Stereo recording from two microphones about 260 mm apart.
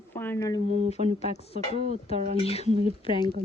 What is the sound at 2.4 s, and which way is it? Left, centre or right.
Speech, left.